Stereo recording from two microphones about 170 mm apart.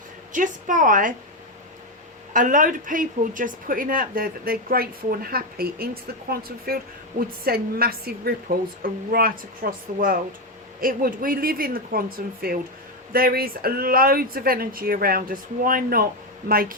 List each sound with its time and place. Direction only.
0.3 s a woman's voice: 50° right (ahead or behind)
2.3 s a woman's voice: 50° right (ahead or behind)